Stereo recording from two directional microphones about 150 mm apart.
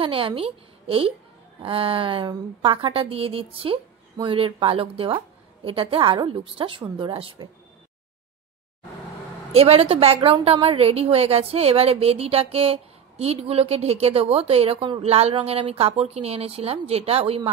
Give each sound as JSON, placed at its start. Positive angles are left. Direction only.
{"t": 0.0, "sound": "a woman's voice", "side_deg": -35}
{"t": 9.5, "sound": "a woman's voice", "side_deg": -40}